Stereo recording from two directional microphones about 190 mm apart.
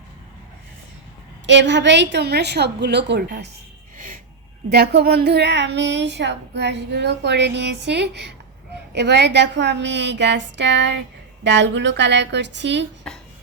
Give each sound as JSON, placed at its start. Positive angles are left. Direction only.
{"t": 1.5, "sound": "speech", "side_deg": -70}
{"t": 3.9, "sound": "a sound", "side_deg": -45}
{"t": 4.7, "sound": "a woman's voice", "side_deg": -60}